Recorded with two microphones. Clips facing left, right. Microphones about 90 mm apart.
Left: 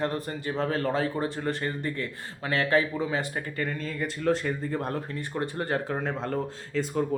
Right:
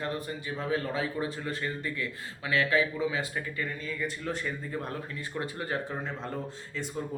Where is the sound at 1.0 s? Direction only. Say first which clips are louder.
Left 4 dB; 45° left (ahead or behind).